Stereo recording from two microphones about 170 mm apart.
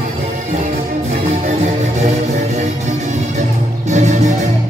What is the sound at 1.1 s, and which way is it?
Music, 40° right (ahead or behind).